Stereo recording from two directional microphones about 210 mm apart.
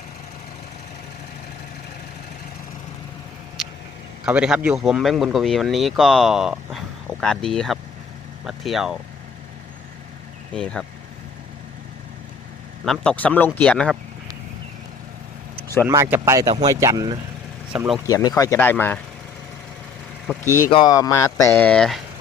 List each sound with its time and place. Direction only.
3.6 s a sound: centre (ahead or behind)
4.3 s speech: 5° right (ahead or behind)
10.5 s speech: 5° left (ahead or behind)
12.8 s speech: 5° left (ahead or behind)
15.5 s vehicle: 10° left (ahead or behind)
15.9 s speech: 10° right (ahead or behind)
17.7 s speech: 5° right (ahead or behind)
18.0 s speech: 15° left (ahead or behind)
20.7 s speech: 20° left (ahead or behind); by 22.0 s centre (ahead or behind)